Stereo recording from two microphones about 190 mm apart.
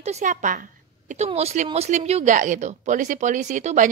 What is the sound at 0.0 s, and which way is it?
A woman's voice, 40° right (ahead or behind).